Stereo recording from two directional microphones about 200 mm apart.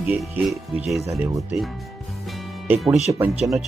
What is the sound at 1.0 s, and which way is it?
Speech, 15° right (ahead or behind).